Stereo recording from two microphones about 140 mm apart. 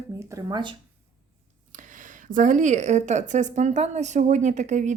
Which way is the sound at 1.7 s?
65° right (ahead or behind).